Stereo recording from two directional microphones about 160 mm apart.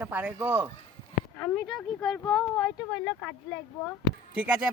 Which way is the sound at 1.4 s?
10° left (ahead or behind).